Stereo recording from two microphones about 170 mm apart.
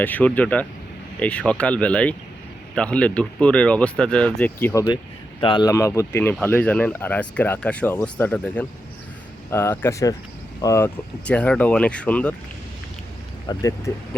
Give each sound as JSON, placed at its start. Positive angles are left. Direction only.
{"t": 0.0, "sound": "speech", "side_deg": 10}
{"t": 5.4, "sound": "speech", "side_deg": 30}
{"t": 13.5, "sound": "speech", "side_deg": 20}